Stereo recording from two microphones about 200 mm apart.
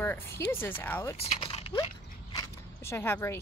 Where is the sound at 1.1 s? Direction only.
30° left (ahead or behind).